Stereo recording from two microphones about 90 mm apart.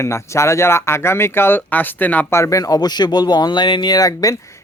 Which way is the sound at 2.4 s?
35° left (ahead or behind).